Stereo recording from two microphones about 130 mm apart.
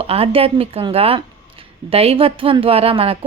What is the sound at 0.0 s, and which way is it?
Speech, 50° right (ahead or behind).